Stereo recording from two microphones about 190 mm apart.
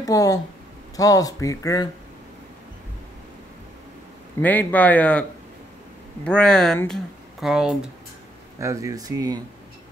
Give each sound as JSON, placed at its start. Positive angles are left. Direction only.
{"t": 0.0, "sound": "speech", "side_deg": 20}
{"t": 4.4, "sound": "speech", "side_deg": 10}
{"t": 6.2, "sound": "speech", "side_deg": 5}
{"t": 8.5, "sound": "speech", "side_deg": -15}